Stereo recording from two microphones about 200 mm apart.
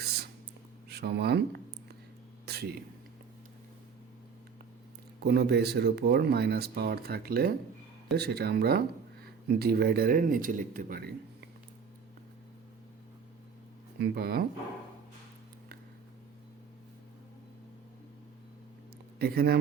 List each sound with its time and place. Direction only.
0.9 s speech: 55° right (ahead or behind)
2.5 s a sound: 55° right (ahead or behind)
5.2 s speech: 55° right (ahead or behind)
14.0 s speech: 50° right (ahead or behind)
19.2 s speech: 50° right (ahead or behind)